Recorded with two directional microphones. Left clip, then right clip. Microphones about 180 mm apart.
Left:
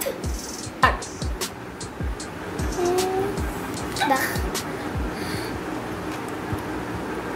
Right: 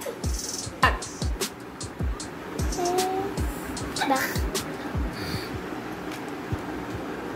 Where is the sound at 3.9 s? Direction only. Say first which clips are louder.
Left 3 dB; centre (ahead or behind).